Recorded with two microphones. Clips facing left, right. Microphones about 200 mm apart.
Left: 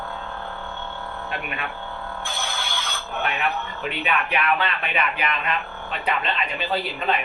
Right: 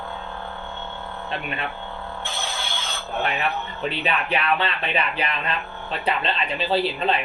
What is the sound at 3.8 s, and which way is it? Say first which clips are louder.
Speech: right 1 dB; 30° right (ahead or behind).